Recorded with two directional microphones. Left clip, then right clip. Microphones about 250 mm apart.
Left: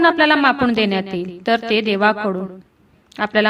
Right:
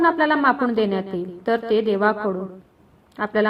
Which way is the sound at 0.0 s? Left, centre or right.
Left.